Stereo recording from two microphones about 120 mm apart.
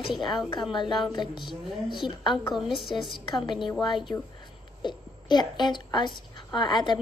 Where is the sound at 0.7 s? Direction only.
40° left (ahead or behind).